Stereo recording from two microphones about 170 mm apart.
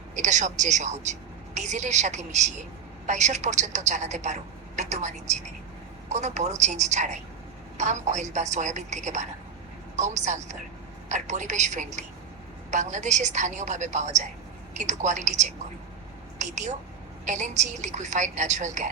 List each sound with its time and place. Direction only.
0.2 s a woman's voice: 45° right (ahead or behind)